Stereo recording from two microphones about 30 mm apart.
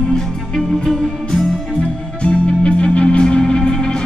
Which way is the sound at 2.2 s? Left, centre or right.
Left.